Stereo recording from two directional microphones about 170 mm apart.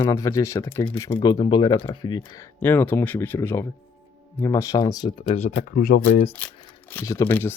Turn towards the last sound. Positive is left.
turn(degrees=15)  # may be behind; listen again after turning